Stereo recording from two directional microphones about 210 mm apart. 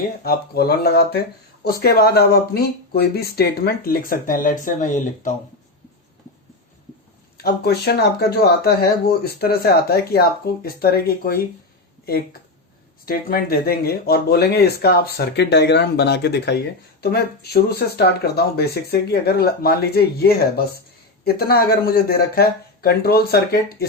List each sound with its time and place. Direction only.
0.0 s speech: 50° left (ahead or behind)
7.3 s speech: 50° left (ahead or behind)